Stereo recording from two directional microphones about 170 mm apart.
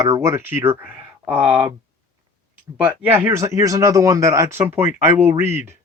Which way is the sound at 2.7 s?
10° right (ahead or behind).